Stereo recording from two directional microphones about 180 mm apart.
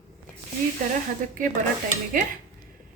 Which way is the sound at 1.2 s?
45° right (ahead or behind).